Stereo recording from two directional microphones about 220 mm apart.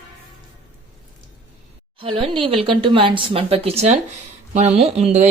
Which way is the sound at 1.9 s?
25° right (ahead or behind).